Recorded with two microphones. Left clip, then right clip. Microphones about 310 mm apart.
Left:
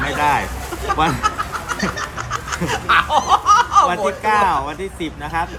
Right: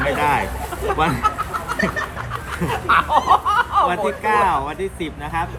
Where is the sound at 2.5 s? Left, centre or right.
Left.